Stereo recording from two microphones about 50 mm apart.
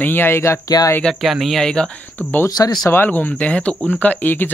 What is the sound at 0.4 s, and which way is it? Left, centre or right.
Speech, left.